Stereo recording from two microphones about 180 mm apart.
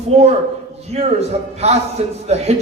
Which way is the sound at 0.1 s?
35° right (ahead or behind).